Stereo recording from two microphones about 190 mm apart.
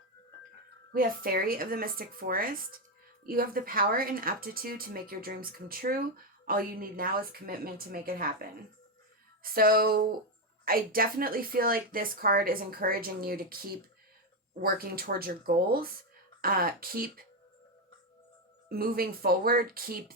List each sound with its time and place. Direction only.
0.9 s a woman's voice: 50° right (ahead or behind)
18.7 s a woman's voice: 50° right (ahead or behind)